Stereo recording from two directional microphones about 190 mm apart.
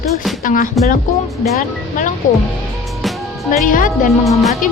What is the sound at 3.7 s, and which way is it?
Speech, 45° left (ahead or behind).